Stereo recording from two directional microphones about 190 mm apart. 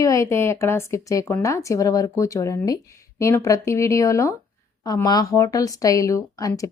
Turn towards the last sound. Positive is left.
turn(degrees=15)  # may be behind; listen again after turning